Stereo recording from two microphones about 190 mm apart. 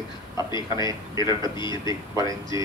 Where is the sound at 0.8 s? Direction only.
20° right (ahead or behind).